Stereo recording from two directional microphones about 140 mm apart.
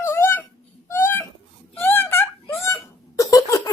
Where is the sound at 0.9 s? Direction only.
15° left (ahead or behind).